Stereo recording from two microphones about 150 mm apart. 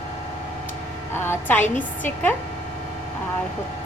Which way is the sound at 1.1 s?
15° left (ahead or behind).